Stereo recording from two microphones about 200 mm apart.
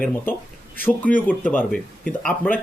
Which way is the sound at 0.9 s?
10° left (ahead or behind).